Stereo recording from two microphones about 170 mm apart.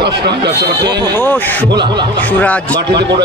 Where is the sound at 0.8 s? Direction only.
25° right (ahead or behind).